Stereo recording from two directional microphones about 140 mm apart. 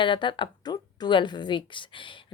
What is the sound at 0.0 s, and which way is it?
A woman's voice, 35° left (ahead or behind).